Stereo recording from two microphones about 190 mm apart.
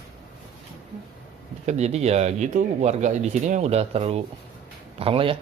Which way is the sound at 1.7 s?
35° right (ahead or behind).